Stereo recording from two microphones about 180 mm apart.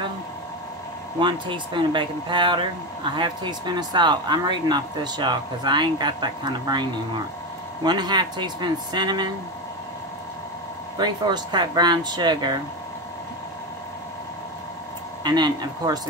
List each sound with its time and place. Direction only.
1.2 s speech: 25° right (ahead or behind)
11.0 s speech: 25° right (ahead or behind)
15.2 s speech: 25° right (ahead or behind)